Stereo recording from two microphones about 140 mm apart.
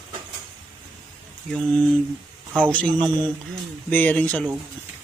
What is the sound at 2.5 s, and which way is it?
Speech, 5° left (ahead or behind).